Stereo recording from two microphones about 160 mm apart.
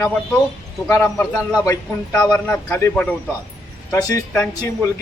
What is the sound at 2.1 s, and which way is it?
A man's voice, 5° left (ahead or behind).